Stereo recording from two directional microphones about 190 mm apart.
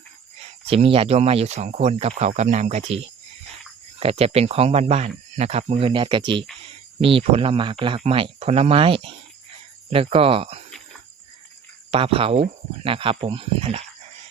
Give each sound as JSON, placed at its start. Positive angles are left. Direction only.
{"t": 0.3, "sound": "speech", "side_deg": -35}
{"t": 11.9, "sound": "speech", "side_deg": -30}